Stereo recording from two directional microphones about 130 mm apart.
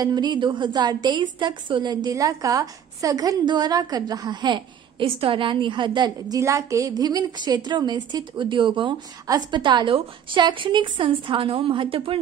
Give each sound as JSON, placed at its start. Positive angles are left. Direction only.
{"t": 0.0, "sound": "a woman's voice", "side_deg": -35}